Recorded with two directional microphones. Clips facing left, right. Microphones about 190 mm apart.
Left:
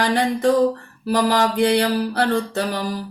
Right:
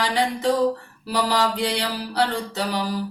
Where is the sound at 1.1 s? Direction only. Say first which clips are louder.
Left 4 dB; 50° left (ahead or behind).